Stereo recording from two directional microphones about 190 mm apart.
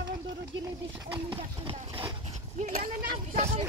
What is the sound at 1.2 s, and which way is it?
Speech, 25° right (ahead or behind).